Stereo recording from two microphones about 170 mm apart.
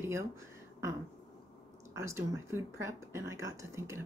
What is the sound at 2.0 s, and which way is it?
Speech, 15° right (ahead or behind).